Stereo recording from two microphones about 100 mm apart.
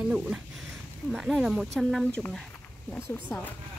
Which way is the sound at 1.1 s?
Centre (ahead or behind).